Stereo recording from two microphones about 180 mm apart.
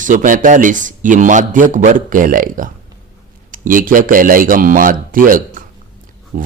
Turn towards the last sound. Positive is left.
turn(degrees=-50)  # may be behind; listen again after turning